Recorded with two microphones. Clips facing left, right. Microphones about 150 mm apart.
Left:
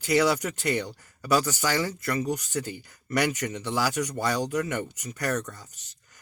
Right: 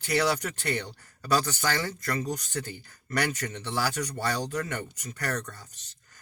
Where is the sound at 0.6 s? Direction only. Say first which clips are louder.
Left 4 dB; 10° left (ahead or behind).